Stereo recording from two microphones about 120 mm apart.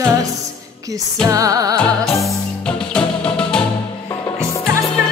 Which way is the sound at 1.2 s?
30° right (ahead or behind).